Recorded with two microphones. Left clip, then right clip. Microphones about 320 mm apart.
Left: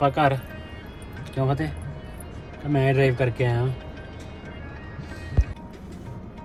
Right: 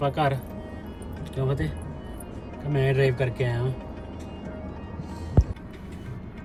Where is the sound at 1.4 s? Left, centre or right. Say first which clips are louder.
Left 3 dB; centre.